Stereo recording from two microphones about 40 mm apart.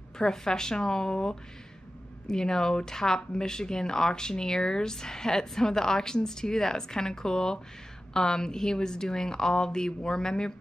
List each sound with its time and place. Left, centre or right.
0.2 s speech: centre